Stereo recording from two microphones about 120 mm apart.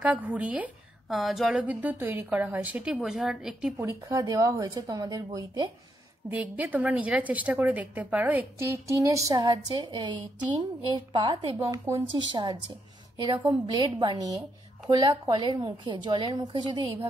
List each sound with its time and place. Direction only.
0.0 s a woman's voice: 10° right (ahead or behind)
3.7 s a woman's voice: 20° right (ahead or behind)
6.3 s a woman's voice: 15° right (ahead or behind); by 17.1 s 35° right (ahead or behind)